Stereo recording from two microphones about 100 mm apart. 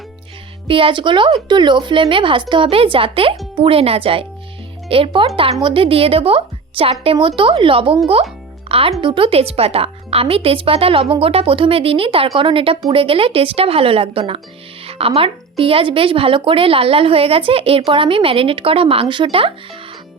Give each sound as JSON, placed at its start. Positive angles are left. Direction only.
{"t": 0.7, "sound": "a woman's voice", "side_deg": -60}
{"t": 8.0, "sound": "a child's voice", "side_deg": -80}
{"t": 8.7, "sound": "a woman's voice", "side_deg": -70}